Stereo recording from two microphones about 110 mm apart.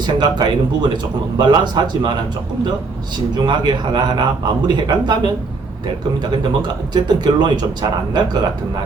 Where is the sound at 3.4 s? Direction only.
40° right (ahead or behind).